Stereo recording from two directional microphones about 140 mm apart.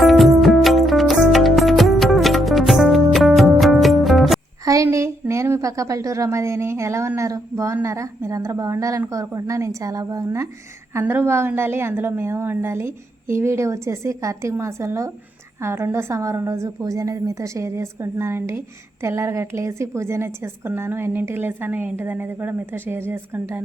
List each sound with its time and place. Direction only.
0.0 s music: centre (ahead or behind)
4.6 s a woman's voice: 20° right (ahead or behind)